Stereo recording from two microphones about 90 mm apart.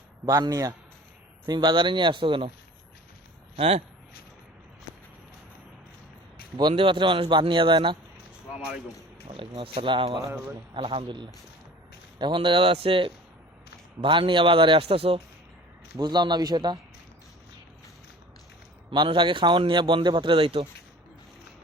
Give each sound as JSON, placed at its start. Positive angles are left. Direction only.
{"t": 0.3, "sound": "a man's voice", "side_deg": -40}
{"t": 1.5, "sound": "a man's voice", "side_deg": -55}
{"t": 6.6, "sound": "a man's voice", "side_deg": -65}
{"t": 9.2, "sound": "a man's voice", "side_deg": -75}
{"t": 10.8, "sound": "a man's voice", "side_deg": -85}
{"t": 14.0, "sound": "a man's voice", "side_deg": -65}
{"t": 16.0, "sound": "speech", "side_deg": -55}
{"t": 18.9, "sound": "a man's voice", "side_deg": -70}